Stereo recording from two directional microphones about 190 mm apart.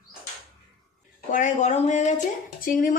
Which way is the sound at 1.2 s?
40° left (ahead or behind).